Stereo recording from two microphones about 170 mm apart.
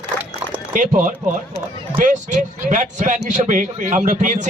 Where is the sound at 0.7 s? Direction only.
50° right (ahead or behind).